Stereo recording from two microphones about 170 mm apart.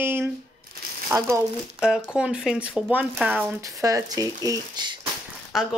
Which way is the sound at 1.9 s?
5° right (ahead or behind).